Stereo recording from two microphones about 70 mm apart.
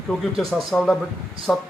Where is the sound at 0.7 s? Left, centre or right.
Left.